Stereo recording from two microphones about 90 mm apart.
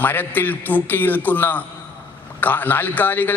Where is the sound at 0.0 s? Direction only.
20° left (ahead or behind).